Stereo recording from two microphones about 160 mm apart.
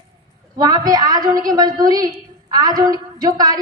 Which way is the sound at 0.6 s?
25° right (ahead or behind).